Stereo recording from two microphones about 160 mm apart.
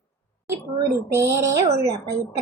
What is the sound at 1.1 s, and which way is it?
A woman's voice, 15° right (ahead or behind).